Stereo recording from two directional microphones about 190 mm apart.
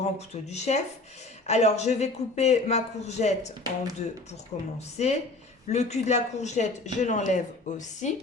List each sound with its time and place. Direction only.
0.0 s a man's voice: 35° left (ahead or behind)